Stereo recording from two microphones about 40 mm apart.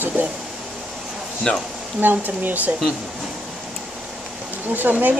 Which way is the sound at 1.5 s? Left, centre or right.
Left.